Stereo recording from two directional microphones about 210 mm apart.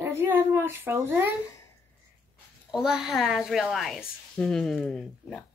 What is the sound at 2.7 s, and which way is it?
A woman's voice, centre (ahead or behind).